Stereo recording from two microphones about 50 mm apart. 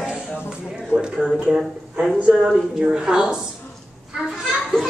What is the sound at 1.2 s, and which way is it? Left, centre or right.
Speech, centre.